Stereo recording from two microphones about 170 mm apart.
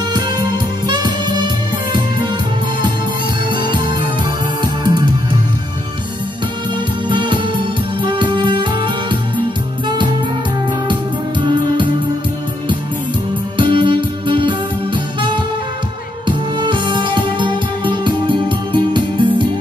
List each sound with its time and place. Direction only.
0.8 s music: 25° right (ahead or behind)
3.4 s music: 30° right (ahead or behind)
7.1 s music: 30° right (ahead or behind)
10.9 s music: 30° right (ahead or behind)
13.6 s music: 30° right (ahead or behind)
16.3 s music: 30° right (ahead or behind)